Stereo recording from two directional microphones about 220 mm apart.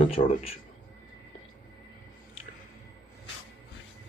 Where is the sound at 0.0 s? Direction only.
25° left (ahead or behind).